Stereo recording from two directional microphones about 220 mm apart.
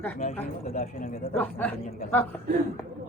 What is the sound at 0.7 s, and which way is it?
Speech, 40° left (ahead or behind).